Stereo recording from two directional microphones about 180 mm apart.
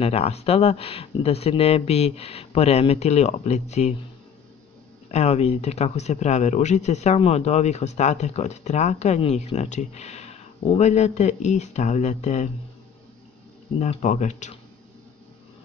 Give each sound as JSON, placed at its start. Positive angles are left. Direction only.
{"t": 0.0, "sound": "speech", "side_deg": 35}
{"t": 5.1, "sound": "speech", "side_deg": 35}
{"t": 13.7, "sound": "speech", "side_deg": 40}